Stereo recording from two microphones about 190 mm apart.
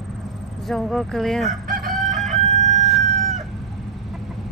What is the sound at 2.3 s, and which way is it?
Chicken, 35° right (ahead or behind).